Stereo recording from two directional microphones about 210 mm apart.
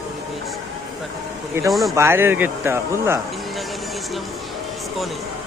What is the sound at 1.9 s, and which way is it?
Speech, 10° right (ahead or behind).